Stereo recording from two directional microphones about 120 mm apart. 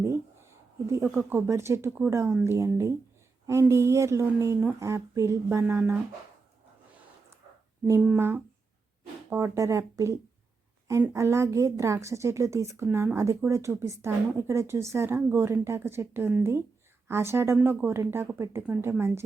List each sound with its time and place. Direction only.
0.9 s speech: 25° right (ahead or behind)
7.9 s speech: 15° right (ahead or behind)